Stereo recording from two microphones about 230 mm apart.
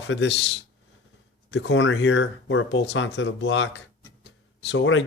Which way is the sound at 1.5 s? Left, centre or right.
Left.